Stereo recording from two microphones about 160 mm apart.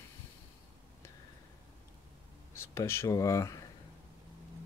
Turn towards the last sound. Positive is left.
turn(degrees=20)  # may be behind; listen again after turning